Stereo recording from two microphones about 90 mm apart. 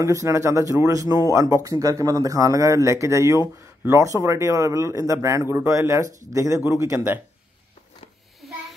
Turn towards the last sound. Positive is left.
turn(degrees=-35)  # may be behind; listen again after turning